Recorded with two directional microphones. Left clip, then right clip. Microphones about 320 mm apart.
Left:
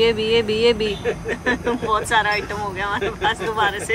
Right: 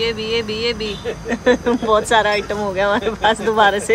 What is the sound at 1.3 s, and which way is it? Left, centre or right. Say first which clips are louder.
Speech: right 8 dB; centre.